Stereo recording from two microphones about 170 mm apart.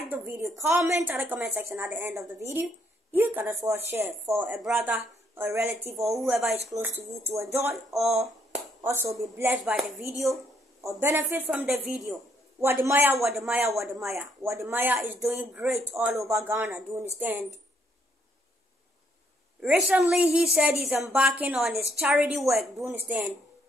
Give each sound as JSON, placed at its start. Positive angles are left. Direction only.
{"t": 0.0, "sound": "a sound", "side_deg": -15}
{"t": 0.6, "sound": "speech", "side_deg": -15}
{"t": 6.0, "sound": "a woman's voice", "side_deg": 0}
{"t": 6.7, "sound": "speech", "side_deg": -15}
{"t": 9.8, "sound": "a woman's voice", "side_deg": 0}
{"t": 10.8, "sound": "speech", "side_deg": -15}
{"t": 12.5, "sound": "a woman's voice", "side_deg": -15}
{"t": 13.7, "sound": "a woman's voice", "side_deg": -15}
{"t": 19.6, "sound": "a woman's voice", "side_deg": -5}